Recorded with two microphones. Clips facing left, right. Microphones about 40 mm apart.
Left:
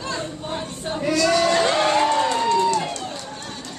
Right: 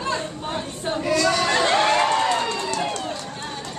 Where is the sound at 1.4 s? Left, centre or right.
Right.